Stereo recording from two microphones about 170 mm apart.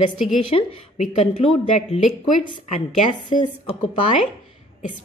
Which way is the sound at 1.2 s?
40° left (ahead or behind).